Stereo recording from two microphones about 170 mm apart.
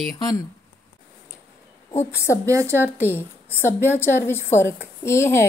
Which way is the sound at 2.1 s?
15° left (ahead or behind).